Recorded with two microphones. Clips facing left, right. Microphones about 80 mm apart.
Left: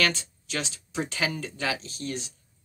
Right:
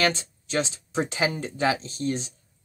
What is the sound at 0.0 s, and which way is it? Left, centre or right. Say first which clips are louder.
Speech: right 2 dB; right.